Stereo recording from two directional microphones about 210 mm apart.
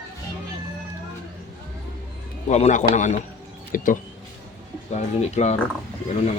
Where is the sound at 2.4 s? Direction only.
30° left (ahead or behind).